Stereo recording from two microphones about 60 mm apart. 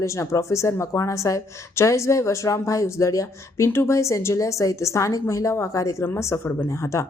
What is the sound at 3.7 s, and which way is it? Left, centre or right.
Speech, left.